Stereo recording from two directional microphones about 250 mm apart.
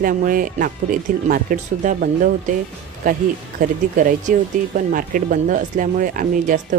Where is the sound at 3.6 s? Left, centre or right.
Right.